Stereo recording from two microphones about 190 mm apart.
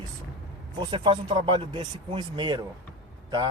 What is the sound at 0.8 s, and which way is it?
A man's voice, 25° right (ahead or behind).